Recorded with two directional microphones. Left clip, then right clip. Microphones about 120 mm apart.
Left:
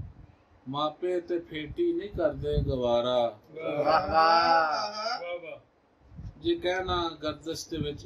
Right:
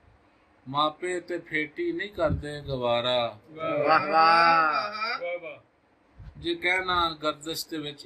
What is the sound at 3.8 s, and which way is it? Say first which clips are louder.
Speech: right 2 dB; 60° right (ahead or behind).